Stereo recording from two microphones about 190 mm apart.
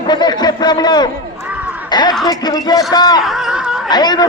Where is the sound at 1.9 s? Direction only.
20° left (ahead or behind).